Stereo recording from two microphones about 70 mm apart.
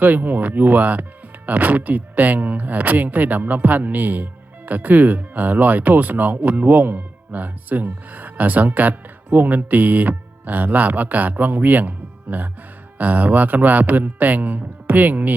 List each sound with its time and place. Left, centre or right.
0.0 s speech: right